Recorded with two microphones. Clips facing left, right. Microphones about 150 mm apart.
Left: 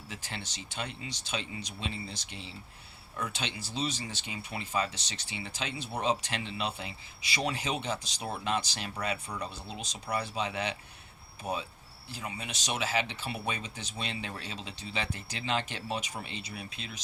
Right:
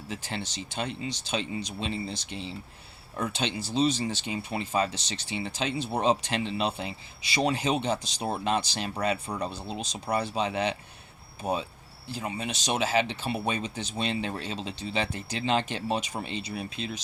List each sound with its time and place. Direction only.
0.1 s speech: 25° right (ahead or behind)